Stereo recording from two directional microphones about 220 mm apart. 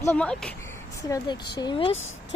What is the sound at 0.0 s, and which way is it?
Speech, 5° left (ahead or behind).